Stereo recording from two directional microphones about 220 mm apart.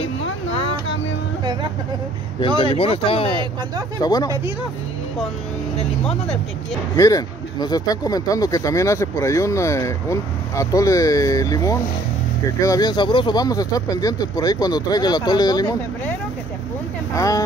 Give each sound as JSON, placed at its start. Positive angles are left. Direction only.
{"t": 2.6, "sound": "speech", "side_deg": 25}
{"t": 7.0, "sound": "speech", "side_deg": 15}
{"t": 17.1, "sound": "speech", "side_deg": 15}